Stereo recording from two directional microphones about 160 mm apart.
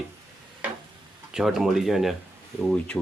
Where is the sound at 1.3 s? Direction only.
Centre (ahead or behind).